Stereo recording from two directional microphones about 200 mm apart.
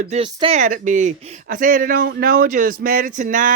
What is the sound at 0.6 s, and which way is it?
Speech, 40° right (ahead or behind).